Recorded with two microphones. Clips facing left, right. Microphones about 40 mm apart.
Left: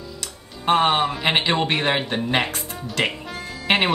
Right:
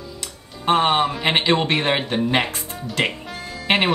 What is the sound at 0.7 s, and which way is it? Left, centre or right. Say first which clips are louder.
Speech: right 1 dB; centre.